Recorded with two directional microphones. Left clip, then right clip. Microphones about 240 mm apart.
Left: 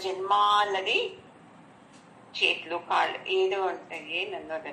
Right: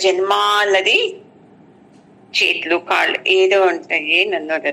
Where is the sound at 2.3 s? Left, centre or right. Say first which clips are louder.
Right 11 dB; right.